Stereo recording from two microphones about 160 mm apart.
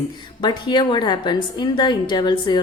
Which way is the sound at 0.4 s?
30° left (ahead or behind).